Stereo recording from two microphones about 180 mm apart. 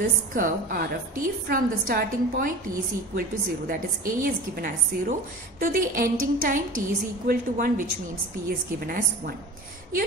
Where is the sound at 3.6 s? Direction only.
50° right (ahead or behind).